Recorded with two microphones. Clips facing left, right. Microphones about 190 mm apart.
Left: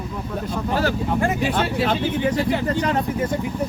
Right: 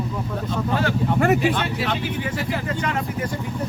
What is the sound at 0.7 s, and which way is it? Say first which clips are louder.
Speech: left 1 dB; 35° left (ahead or behind).